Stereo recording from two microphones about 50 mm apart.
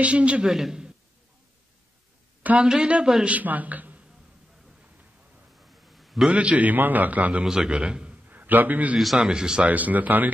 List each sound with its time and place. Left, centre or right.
0.0 s a man's voice: right
0.5 s a man's voice: centre
2.6 s a man's voice: centre
3.3 s a man's voice: right
5.9 s a sound: centre
6.3 s a man's voice: right
7.4 s a man's voice: centre
8.3 s a man's voice: right
9.2 s a man's voice: centre
9.7 s a man's voice: right